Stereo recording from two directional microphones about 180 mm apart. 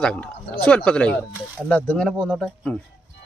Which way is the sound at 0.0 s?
5° left (ahead or behind).